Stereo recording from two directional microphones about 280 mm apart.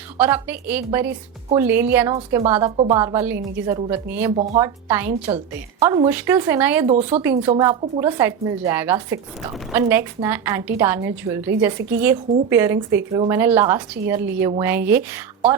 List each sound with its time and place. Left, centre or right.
0.2 s a woman's voice: centre
2.1 s speech: centre
2.5 s a woman's voice: centre
6.8 s speech: right
7.2 s a woman's voice: centre